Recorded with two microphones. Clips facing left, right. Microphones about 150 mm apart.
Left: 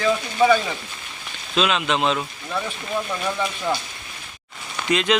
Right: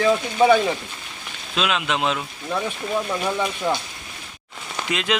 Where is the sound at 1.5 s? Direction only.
5° right (ahead or behind).